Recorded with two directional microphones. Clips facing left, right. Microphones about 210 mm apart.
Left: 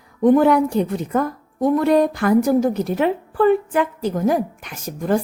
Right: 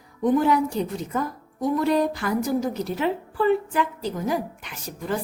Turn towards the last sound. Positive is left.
turn(degrees=45)  # may be behind; listen again after turning